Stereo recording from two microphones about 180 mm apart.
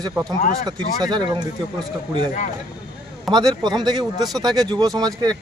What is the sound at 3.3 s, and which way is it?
Speech, 20° right (ahead or behind).